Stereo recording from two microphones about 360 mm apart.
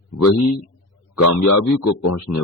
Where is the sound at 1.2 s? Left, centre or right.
Left.